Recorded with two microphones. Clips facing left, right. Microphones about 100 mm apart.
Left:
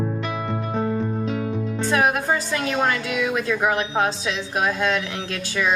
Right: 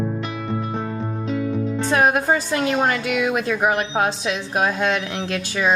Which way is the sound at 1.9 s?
30° right (ahead or behind).